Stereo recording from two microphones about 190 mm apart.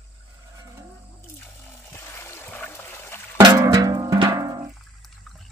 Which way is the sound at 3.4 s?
20° right (ahead or behind).